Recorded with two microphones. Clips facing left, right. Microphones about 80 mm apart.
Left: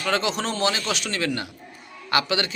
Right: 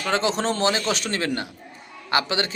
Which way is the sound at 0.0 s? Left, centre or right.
Right.